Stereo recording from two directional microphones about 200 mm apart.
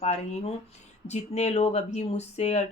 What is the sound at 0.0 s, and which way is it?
Speech, 30° left (ahead or behind).